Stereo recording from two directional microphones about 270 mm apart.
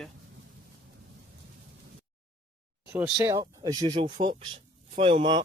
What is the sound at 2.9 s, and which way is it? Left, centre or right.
Speech, centre.